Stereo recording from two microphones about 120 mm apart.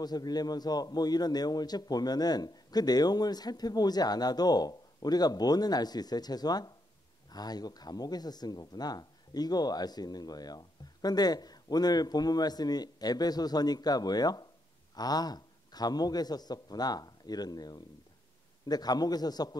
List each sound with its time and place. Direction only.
0.0 s speech: 35° left (ahead or behind)